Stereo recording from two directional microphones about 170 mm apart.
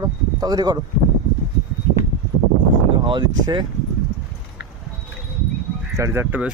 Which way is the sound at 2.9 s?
30° right (ahead or behind).